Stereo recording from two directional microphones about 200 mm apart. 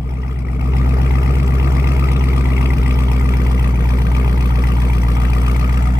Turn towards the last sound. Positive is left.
turn(degrees=-20)  # may be behind; listen again after turning